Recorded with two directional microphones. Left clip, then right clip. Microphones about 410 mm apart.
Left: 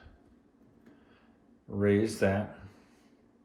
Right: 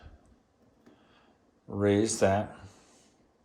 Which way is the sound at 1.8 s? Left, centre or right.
Centre.